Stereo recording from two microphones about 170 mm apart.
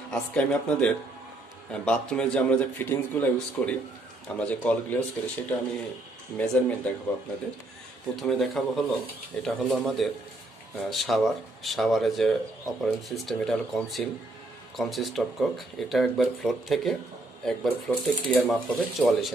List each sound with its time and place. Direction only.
0.1 s a man's voice: 5° left (ahead or behind)
8.2 s speech: centre (ahead or behind)